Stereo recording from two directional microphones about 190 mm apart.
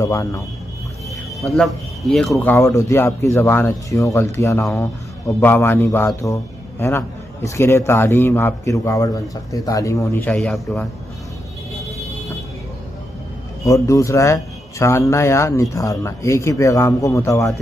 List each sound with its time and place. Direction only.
0.0 s a man's voice: 15° left (ahead or behind)
1.4 s speech: centre (ahead or behind)
2.5 s a man's voice: 15° left (ahead or behind)
13.7 s a man's voice: 15° left (ahead or behind)